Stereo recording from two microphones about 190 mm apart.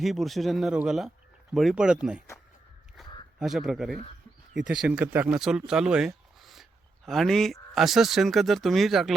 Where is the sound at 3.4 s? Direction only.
Centre (ahead or behind).